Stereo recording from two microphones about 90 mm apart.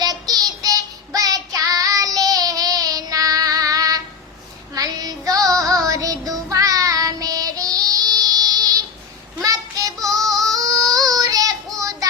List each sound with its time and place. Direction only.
0.0 s child singing: 45° right (ahead or behind)
10.2 s music: 40° right (ahead or behind)
10.9 s child singing: 45° right (ahead or behind)